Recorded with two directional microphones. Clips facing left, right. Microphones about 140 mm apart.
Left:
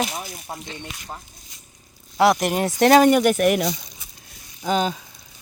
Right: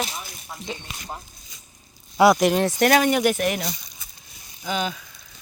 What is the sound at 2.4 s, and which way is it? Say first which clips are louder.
Speech: right 3 dB; 10° left (ahead or behind).